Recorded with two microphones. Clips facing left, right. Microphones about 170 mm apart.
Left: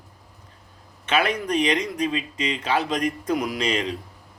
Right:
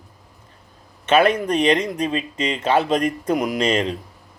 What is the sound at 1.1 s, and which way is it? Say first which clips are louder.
Speech: right 6 dB; 55° right (ahead or behind).